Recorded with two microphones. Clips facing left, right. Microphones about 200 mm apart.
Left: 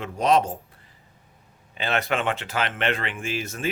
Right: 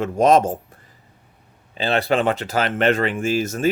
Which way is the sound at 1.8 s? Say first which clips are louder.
Right 6 dB; 30° right (ahead or behind).